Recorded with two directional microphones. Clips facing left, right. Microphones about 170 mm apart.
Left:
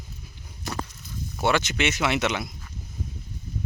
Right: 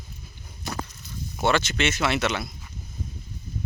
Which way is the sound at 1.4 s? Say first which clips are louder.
Even; 15° left (ahead or behind).